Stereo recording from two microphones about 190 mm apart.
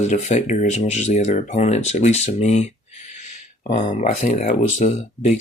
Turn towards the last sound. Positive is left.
turn(degrees=40)  # may be behind; listen again after turning